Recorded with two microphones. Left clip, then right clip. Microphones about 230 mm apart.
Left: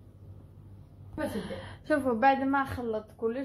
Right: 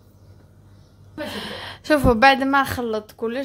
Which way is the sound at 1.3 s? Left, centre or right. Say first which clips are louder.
Right 8 dB; right.